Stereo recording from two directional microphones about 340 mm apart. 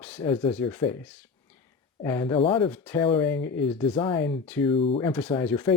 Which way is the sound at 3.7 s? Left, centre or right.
Centre.